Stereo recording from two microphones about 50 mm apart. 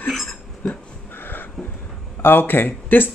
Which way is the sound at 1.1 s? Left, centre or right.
Left.